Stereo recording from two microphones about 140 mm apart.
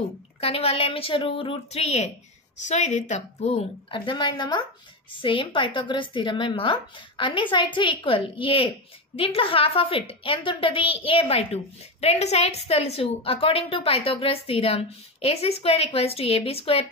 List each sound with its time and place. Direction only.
0.4 s a woman's voice: 45° left (ahead or behind)
3.9 s a woman's voice: 35° left (ahead or behind)